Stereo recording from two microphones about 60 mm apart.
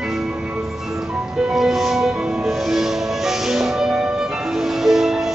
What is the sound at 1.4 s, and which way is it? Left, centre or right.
Music, centre.